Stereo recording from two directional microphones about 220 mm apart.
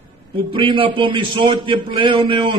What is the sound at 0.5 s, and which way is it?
Speech, 25° right (ahead or behind).